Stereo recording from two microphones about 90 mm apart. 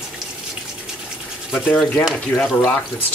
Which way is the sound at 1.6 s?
15° left (ahead or behind).